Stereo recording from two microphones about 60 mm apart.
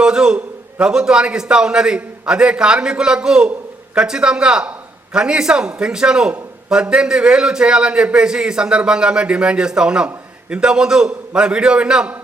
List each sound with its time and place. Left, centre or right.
0.0 s a man's voice: centre